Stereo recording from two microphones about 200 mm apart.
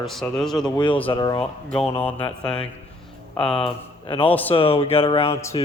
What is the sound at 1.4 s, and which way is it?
Speech, 5° left (ahead or behind).